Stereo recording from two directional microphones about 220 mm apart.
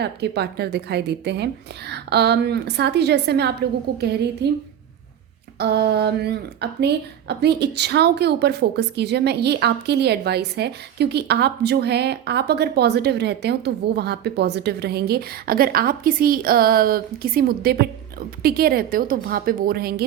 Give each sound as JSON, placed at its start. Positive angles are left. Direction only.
{"t": 0.0, "sound": "a woman's voice", "side_deg": -50}